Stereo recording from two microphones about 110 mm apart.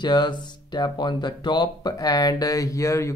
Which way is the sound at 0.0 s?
40° left (ahead or behind).